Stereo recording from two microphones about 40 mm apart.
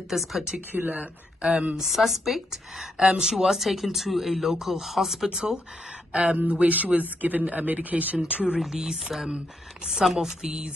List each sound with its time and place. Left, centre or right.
0.1 s a woman's voice: centre
0.7 s speech: right
0.9 s speech: right
1.8 s a woman's voice: centre
5.3 s speech: centre
6.1 s speech: right
8.3 s speech: right
8.5 s speech: centre